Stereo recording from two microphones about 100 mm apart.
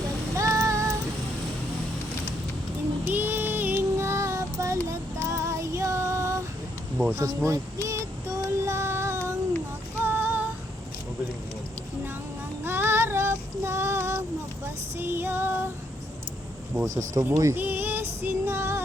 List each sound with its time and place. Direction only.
0.3 s music: 30° right (ahead or behind)
3.0 s music: 20° right (ahead or behind)
7.0 s child singing: 20° right (ahead or behind)
10.0 s female singing: 20° right (ahead or behind)
12.6 s child singing: 25° right (ahead or behind)
16.8 s speech: 30° right (ahead or behind)
17.6 s female singing: 20° right (ahead or behind)